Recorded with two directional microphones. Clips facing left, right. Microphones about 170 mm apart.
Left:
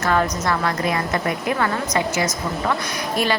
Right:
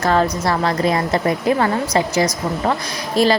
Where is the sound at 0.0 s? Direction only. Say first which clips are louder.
Right 3 dB; 30° right (ahead or behind).